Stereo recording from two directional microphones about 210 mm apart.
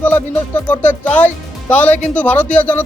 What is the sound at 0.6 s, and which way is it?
Speech, 10° left (ahead or behind).